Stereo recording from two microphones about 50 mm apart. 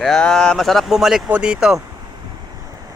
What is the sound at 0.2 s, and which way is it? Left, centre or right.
Speech, centre.